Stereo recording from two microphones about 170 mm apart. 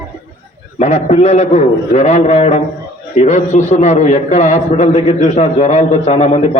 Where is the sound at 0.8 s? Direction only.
40° left (ahead or behind).